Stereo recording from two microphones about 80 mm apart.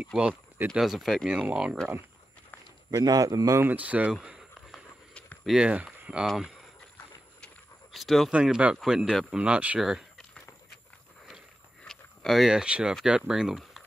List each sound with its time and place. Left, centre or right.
0.2 s speech: centre
0.7 s speech: centre
1.5 s speech: centre
2.9 s a man's voice: right
3.6 s speech: centre
4.1 s a sound: centre
5.6 s speech: centre
6.2 s speech: centre
7.9 s speech: centre
8.3 s speech: centre
9.8 s speech: centre
11.8 s a sound: centre
13.0 s speech: centre